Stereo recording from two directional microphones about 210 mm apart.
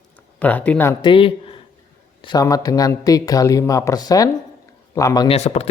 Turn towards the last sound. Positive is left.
turn(degrees=30)  # may be behind; listen again after turning